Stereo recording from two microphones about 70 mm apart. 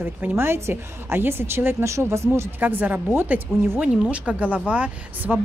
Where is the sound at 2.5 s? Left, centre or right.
Right.